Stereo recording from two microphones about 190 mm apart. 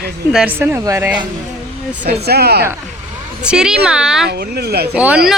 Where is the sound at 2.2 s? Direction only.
55° right (ahead or behind).